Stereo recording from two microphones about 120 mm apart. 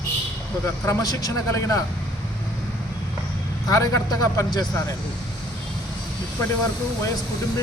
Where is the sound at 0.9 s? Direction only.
30° left (ahead or behind).